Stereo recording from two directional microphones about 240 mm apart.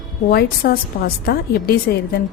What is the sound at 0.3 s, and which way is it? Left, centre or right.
A woman's voice, left.